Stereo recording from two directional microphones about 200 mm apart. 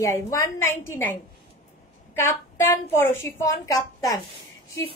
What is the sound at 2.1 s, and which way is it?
A woman's voice, 10° left (ahead or behind).